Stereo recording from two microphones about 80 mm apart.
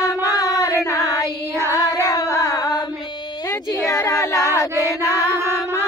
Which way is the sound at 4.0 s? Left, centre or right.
Left.